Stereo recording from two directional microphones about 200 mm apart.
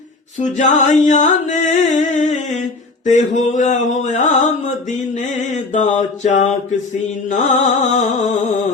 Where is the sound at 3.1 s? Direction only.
35° left (ahead or behind).